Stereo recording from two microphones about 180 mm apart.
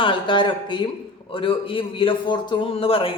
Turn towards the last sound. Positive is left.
turn(degrees=30)  # may be behind; listen again after turning